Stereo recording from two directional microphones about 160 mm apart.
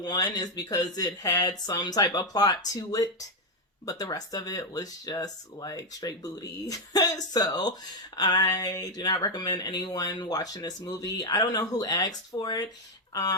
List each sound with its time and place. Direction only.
0.0 s speech: 25° left (ahead or behind)